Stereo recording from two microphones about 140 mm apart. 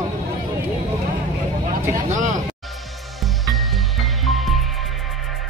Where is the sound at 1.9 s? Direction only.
65° right (ahead or behind).